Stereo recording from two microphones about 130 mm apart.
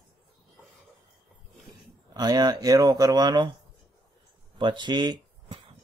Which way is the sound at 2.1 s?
30° right (ahead or behind).